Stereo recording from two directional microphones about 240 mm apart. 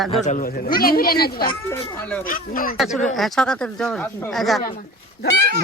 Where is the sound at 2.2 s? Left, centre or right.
Left.